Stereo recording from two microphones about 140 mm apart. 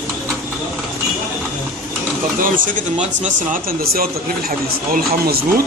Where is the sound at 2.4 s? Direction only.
75° right (ahead or behind); by 5.4 s 90° right.